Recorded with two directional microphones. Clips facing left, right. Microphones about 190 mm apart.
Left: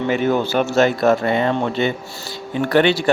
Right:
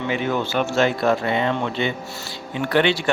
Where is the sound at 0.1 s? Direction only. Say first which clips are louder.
Left 5 dB; 40° left (ahead or behind).